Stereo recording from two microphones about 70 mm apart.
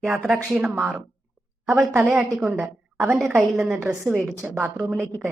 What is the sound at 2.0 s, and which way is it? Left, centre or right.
Speech, centre.